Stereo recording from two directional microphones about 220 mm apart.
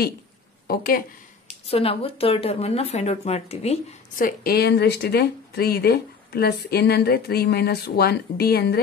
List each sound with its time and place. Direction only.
0.7 s speech: 40° left (ahead or behind)
1.7 s speech: 25° left (ahead or behind); by 8.8 s 45° left (ahead or behind)